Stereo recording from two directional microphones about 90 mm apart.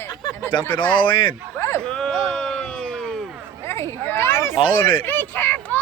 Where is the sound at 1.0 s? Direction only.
65° left (ahead or behind).